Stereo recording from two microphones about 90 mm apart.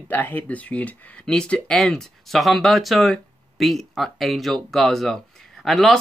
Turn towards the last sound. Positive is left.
turn(degrees=5)  # may be behind; listen again after turning